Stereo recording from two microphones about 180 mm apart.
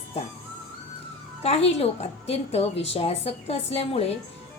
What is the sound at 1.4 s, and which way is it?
A woman's voice, 35° left (ahead or behind).